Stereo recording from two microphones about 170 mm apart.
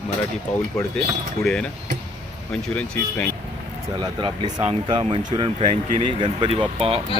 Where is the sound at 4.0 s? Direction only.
30° right (ahead or behind).